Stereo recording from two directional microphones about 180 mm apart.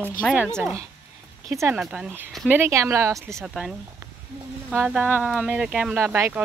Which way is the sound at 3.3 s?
Centre (ahead or behind).